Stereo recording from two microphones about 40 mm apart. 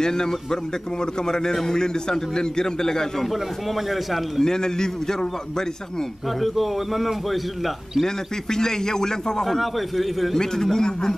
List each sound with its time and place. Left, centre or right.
0.0 s a man's voice: centre
4.4 s a man's voice: centre
6.4 s a man's voice: centre
8.0 s a man's voice: centre
10.4 s a man's voice: centre